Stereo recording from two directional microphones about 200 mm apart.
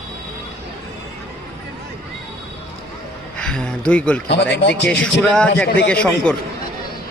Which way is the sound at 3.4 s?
5° left (ahead or behind).